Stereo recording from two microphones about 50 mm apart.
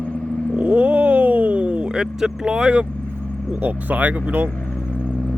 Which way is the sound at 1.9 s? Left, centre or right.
Centre.